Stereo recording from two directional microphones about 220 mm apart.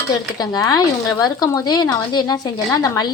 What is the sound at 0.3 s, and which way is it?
Speech, 20° left (ahead or behind).